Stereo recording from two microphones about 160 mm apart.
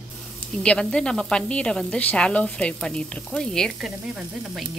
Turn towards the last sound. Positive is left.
turn(degrees=0)  # may be behind; listen again after turning